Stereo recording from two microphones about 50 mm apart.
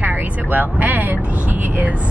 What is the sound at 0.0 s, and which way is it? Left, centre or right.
Speech, right.